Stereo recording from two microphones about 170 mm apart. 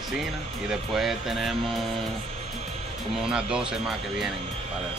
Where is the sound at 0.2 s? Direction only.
Centre (ahead or behind).